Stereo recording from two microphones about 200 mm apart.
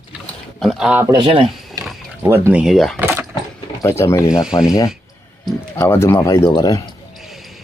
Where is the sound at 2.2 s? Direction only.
10° right (ahead or behind).